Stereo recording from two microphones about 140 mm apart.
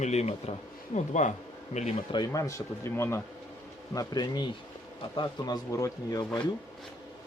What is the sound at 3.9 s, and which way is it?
Speech, 30° left (ahead or behind).